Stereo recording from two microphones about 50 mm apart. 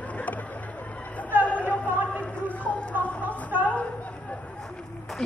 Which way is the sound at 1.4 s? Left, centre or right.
Left.